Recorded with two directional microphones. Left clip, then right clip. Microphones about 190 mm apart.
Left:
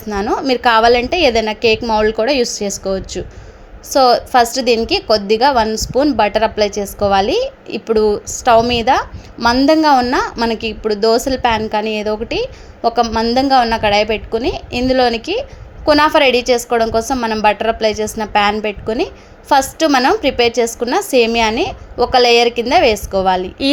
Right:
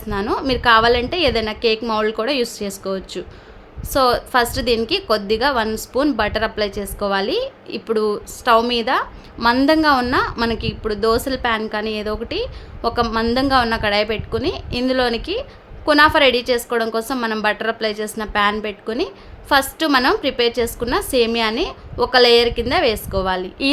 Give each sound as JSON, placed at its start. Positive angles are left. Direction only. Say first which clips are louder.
{"t": 0.1, "sound": "a woman's voice", "louder": "left 4 dB", "side_deg": 10}